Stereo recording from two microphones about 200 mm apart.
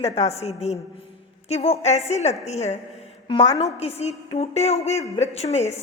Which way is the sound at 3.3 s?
25° left (ahead or behind).